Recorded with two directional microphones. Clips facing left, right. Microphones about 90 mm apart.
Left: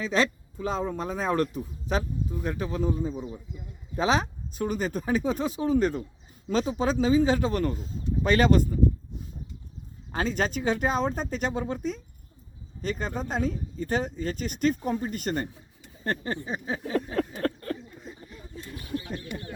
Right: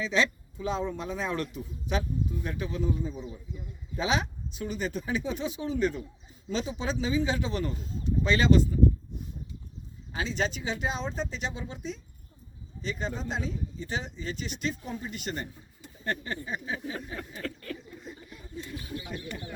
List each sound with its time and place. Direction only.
0.0 s a man's voice: 45° left (ahead or behind)
10.1 s a man's voice: 50° left (ahead or behind)
17.4 s a sound: 40° left (ahead or behind)